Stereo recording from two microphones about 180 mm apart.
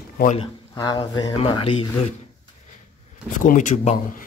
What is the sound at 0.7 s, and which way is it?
Speech, 20° left (ahead or behind).